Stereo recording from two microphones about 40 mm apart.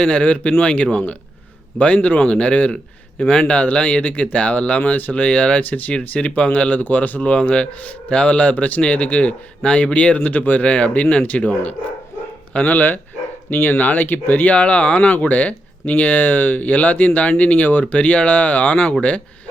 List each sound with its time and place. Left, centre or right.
0.0 s speech: left
4.9 s speech: left
5.2 s speech: left
5.6 s speech: left
6.1 s speech: left
7.2 s speech: left
10.2 s speech: left
10.6 s speech: left
14.5 s speech: left